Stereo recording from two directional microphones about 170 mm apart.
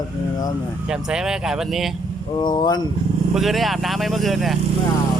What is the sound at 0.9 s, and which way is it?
Speech, 5° right (ahead or behind).